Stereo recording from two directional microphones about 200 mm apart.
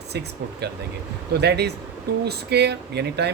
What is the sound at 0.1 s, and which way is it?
A man's voice, 55° right (ahead or behind).